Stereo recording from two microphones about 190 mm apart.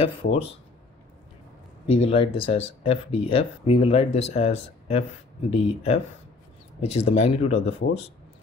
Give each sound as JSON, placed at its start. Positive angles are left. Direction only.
{"t": 0.0, "sound": "speech", "side_deg": 30}
{"t": 1.9, "sound": "speech", "side_deg": 30}